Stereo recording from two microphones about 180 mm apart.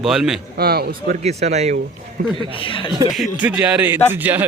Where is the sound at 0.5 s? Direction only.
60° right (ahead or behind).